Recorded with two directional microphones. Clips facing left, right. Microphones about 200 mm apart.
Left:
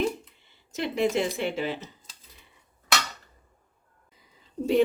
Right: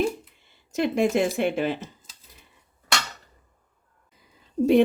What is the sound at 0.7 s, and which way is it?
Speech, 50° right (ahead or behind).